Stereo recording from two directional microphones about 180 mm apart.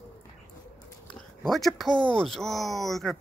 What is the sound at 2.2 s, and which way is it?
Speech, centre (ahead or behind).